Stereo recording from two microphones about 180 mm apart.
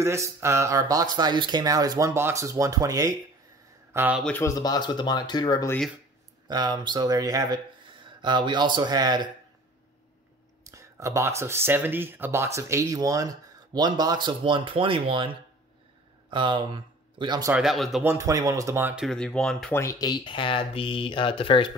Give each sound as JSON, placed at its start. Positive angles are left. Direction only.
{"t": 0.0, "sound": "speech", "side_deg": -15}
{"t": 4.2, "sound": "speech", "side_deg": 10}
{"t": 6.4, "sound": "speech", "side_deg": -20}
{"t": 10.6, "sound": "speech", "side_deg": -15}
{"t": 16.3, "sound": "speech", "side_deg": -25}
{"t": 17.5, "sound": "speech", "side_deg": 0}
{"t": 18.0, "sound": "speech", "side_deg": -15}
{"t": 19.0, "sound": "speech", "side_deg": 5}
{"t": 19.7, "sound": "speech", "side_deg": 15}